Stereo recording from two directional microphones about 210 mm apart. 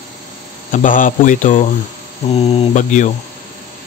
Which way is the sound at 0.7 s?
40° left (ahead or behind).